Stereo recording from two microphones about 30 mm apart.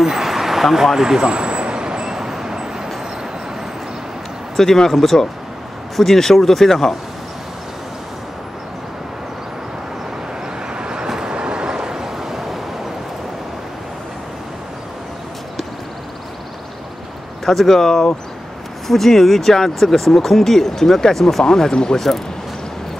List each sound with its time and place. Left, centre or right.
0.0 s vehicle: centre
4.6 s speech: centre
10.7 s vehicle: right
17.5 s speech: centre